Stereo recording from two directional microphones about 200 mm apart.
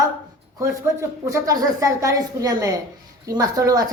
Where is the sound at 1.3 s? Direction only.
15° right (ahead or behind).